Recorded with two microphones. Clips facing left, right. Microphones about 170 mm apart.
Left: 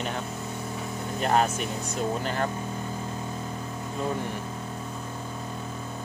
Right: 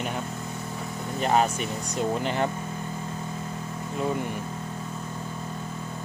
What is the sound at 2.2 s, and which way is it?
Speech, 20° right (ahead or behind).